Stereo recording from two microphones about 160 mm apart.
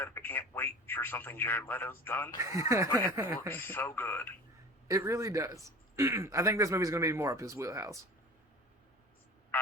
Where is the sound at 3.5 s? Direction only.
15° left (ahead or behind).